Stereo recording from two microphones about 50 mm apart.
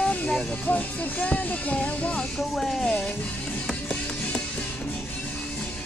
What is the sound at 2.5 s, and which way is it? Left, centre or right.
Speech, centre.